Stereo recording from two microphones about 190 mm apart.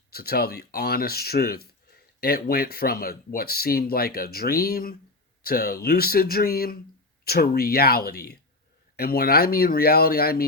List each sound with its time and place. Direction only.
0.1 s speech: 55° left (ahead or behind)